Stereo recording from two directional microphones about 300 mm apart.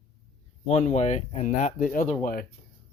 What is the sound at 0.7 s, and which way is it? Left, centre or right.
A man's voice, left.